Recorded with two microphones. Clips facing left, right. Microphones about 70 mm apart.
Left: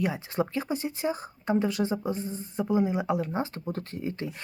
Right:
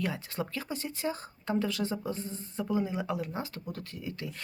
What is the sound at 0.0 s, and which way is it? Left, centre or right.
Speech, left.